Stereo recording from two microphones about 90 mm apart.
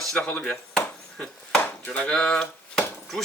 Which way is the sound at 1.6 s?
15° left (ahead or behind).